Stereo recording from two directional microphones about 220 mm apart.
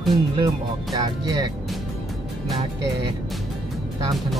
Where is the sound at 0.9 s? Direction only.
20° right (ahead or behind).